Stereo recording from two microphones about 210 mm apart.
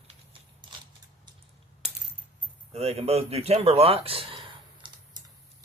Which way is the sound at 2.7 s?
30° right (ahead or behind).